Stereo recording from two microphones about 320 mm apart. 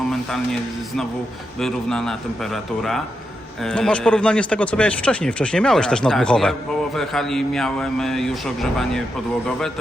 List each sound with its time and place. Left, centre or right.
1.5 s speech: centre